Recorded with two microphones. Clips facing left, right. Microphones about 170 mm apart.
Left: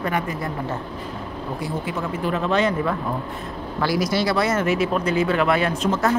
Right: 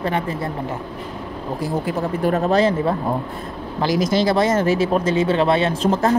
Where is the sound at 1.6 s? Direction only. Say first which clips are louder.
Right 6 dB; 40° right (ahead or behind).